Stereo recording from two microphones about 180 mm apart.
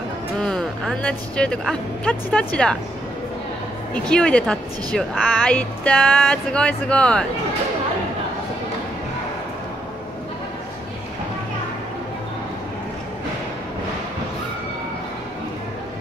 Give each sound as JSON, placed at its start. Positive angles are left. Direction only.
{"t": 0.4, "sound": "speech", "side_deg": 5}
{"t": 3.9, "sound": "speech", "side_deg": 5}